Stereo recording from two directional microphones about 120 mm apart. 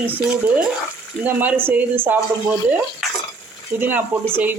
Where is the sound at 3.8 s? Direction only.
15° right (ahead or behind).